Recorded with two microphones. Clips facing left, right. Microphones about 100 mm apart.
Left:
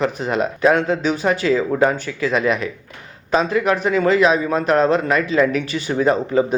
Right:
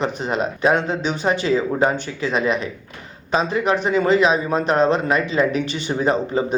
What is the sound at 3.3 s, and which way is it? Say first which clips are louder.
Speech: left 2 dB; 25° right (ahead or behind).